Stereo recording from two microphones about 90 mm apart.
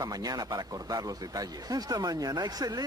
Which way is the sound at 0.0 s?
45° right (ahead or behind).